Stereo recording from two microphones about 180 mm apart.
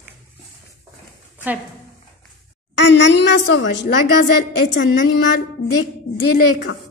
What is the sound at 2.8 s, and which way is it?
A woman's voice, 80° left.